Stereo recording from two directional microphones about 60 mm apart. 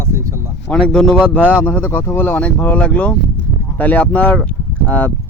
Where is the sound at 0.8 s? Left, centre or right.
Centre; by 2.4 s left.